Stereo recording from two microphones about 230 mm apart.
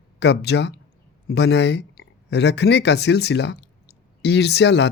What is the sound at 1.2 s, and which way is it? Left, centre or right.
Speech, left.